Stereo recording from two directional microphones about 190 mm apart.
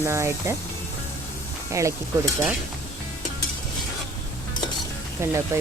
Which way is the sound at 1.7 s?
15° right (ahead or behind).